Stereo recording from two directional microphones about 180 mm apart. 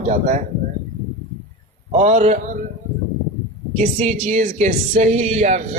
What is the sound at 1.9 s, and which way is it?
Speech, 40° right (ahead or behind).